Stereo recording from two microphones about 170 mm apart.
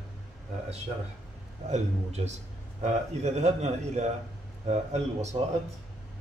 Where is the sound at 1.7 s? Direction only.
40° right (ahead or behind).